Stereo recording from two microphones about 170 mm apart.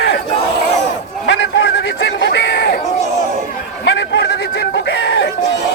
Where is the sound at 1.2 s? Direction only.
90° left.